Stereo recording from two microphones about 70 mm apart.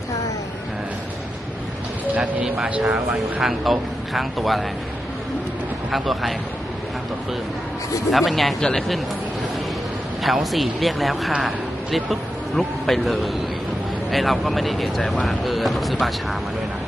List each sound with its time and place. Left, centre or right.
2.1 s speech: right
3.4 s speech: centre
5.9 s speech: centre
8.1 s speech: centre
10.2 s speech: centre